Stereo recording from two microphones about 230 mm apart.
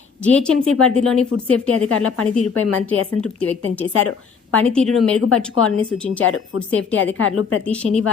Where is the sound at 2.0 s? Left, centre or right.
Left.